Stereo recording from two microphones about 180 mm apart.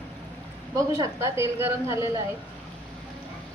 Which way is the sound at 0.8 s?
20° right (ahead or behind).